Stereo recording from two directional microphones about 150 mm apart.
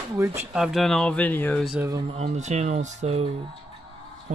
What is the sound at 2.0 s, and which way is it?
Speech, 45° right (ahead or behind).